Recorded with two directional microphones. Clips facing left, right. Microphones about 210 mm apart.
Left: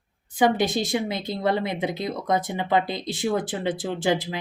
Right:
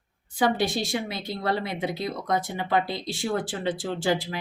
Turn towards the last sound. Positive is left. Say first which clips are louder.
# left 2 dB
turn(degrees=20)  # may be behind; listen again after turning